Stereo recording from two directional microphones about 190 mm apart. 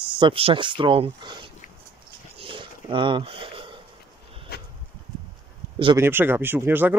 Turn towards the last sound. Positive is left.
turn(degrees=-10)  # may be behind; listen again after turning